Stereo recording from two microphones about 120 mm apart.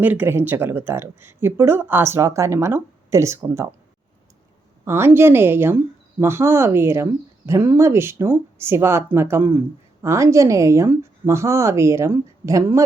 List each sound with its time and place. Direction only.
0.0 s speech: 15° right (ahead or behind)
4.9 s speech: 20° right (ahead or behind)